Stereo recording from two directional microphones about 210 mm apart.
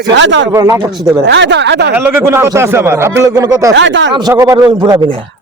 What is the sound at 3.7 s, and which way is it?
Speech, 60° right (ahead or behind).